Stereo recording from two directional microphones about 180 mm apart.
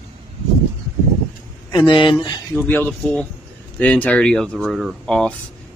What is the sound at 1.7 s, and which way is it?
Speech, 30° left (ahead or behind).